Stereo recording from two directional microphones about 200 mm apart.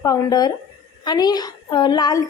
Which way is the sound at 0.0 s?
15° left (ahead or behind).